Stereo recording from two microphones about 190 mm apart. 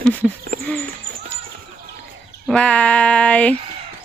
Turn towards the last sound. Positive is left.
turn(degrees=5)  # may be behind; listen again after turning